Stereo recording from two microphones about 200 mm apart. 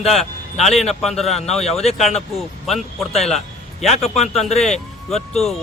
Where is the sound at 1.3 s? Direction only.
30° left (ahead or behind).